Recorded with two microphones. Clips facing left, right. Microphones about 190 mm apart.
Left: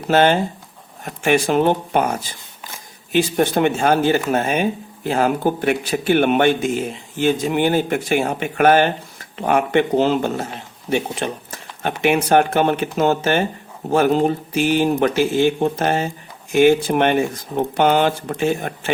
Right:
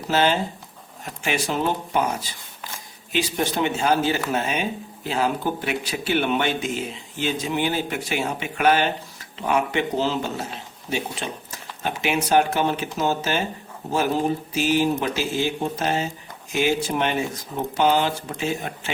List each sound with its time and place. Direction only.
0.1 s speech: 55° left (ahead or behind)